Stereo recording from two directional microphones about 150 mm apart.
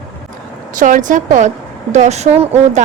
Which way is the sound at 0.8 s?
60° right (ahead or behind).